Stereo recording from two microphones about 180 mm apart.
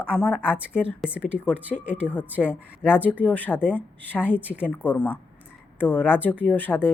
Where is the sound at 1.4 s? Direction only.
10° left (ahead or behind).